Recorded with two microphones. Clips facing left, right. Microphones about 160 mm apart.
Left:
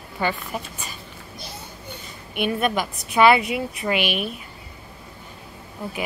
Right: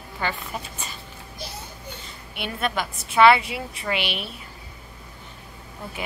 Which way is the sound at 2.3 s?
15° left (ahead or behind).